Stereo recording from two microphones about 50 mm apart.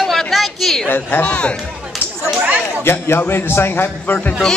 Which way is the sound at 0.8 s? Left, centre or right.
Left.